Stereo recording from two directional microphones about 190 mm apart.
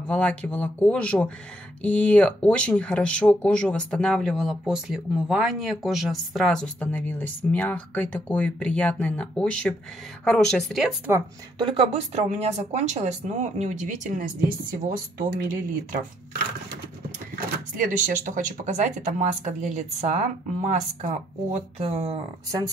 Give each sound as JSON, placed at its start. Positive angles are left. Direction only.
{"t": 0.1, "sound": "speech", "side_deg": 5}
{"t": 11.5, "sound": "speech", "side_deg": -25}
{"t": 17.7, "sound": "speech", "side_deg": -45}